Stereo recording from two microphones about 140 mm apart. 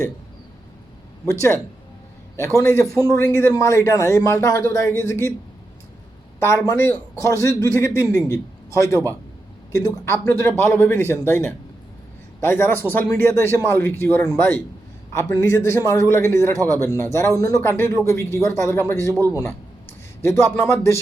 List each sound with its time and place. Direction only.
1.3 s a man's voice: 20° left (ahead or behind)
2.9 s a man's voice: 20° left (ahead or behind)
6.4 s a man's voice: 20° left (ahead or behind)